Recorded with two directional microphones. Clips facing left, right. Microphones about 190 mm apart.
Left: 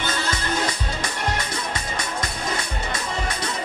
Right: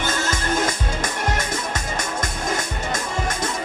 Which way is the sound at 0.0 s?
45° right (ahead or behind).